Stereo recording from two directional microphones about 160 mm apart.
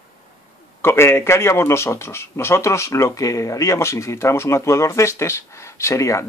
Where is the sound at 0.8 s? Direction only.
15° left (ahead or behind).